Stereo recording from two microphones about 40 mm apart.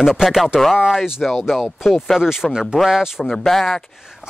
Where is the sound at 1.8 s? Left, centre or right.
Centre.